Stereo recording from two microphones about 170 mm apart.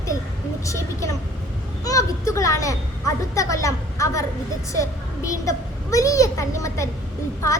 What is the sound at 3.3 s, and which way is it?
A woman's voice, 20° left (ahead or behind).